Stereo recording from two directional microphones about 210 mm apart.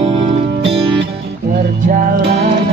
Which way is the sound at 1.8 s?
40° right (ahead or behind).